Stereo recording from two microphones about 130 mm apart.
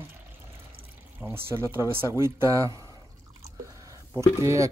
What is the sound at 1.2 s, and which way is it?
Speech, 20° right (ahead or behind).